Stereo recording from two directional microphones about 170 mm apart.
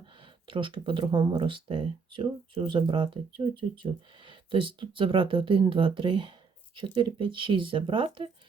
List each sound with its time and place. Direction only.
0.0 s speech: 30° right (ahead or behind)